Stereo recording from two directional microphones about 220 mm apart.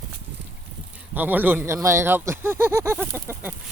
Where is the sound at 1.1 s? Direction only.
10° right (ahead or behind).